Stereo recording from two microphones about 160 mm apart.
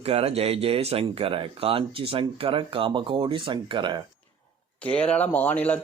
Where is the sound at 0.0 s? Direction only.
40° right (ahead or behind).